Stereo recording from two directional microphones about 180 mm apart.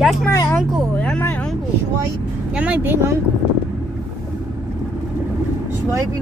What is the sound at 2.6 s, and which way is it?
Speech, 10° right (ahead or behind).